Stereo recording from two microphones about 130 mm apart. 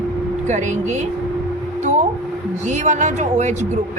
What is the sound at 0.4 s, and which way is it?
Speech, 65° right (ahead or behind).